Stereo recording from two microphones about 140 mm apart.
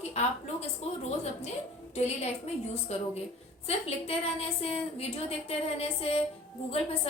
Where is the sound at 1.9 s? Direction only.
50° left (ahead or behind).